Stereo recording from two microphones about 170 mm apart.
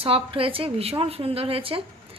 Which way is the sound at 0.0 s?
35° right (ahead or behind).